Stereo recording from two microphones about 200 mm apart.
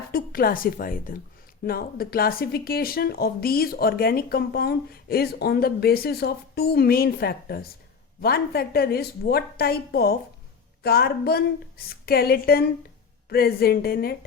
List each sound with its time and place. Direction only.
0.1 s speech: 50° left (ahead or behind)